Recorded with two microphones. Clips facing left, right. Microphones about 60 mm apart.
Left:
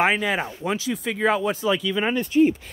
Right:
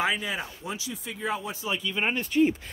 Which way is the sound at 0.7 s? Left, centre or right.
Left.